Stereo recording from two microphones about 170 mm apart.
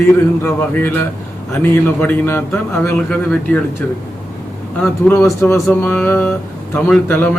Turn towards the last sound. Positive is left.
turn(degrees=10)  # may be behind; listen again after turning